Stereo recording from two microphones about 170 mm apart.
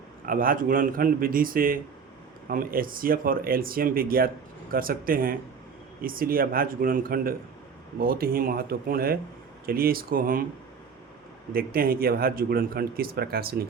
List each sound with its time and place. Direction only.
0.3 s speech: 55° right (ahead or behind)
11.5 s speech: 60° right (ahead or behind)